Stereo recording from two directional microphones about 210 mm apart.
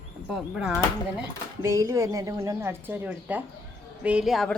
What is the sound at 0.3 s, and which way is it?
Speech, 5° right (ahead or behind).